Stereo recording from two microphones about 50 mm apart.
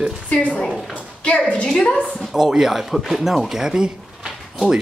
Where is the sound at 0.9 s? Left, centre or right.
Left.